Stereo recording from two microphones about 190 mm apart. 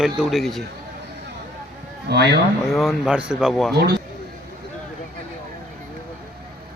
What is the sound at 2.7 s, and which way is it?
Speech, centre (ahead or behind).